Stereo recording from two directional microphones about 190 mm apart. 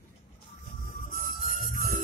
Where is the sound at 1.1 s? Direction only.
45° left (ahead or behind).